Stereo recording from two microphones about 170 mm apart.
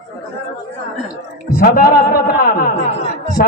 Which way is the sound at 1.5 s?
55° left (ahead or behind).